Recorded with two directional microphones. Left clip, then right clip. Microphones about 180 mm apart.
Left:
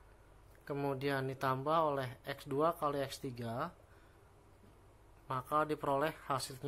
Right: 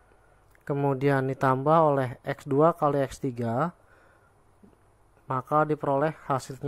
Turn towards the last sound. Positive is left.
turn(degrees=-55)  # may be behind; listen again after turning